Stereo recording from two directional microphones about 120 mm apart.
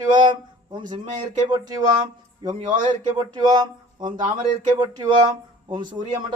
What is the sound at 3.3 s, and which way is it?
Speech, 35° right (ahead or behind).